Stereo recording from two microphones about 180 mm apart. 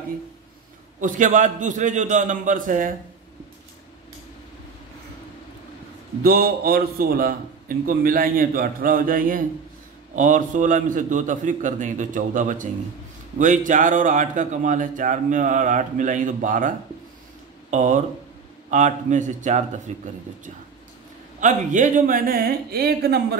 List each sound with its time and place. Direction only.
1.0 s a man's voice: 45° right (ahead or behind)
6.2 s a man's voice: 55° right (ahead or behind)
21.4 s a man's voice: 45° right (ahead or behind); by 23.2 s 60° right (ahead or behind)